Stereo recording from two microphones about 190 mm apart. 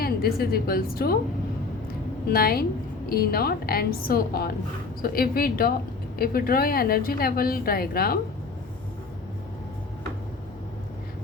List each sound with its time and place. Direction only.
0.0 s a woman's voice: 55° left (ahead or behind)
2.3 s a woman's voice: 55° left (ahead or behind)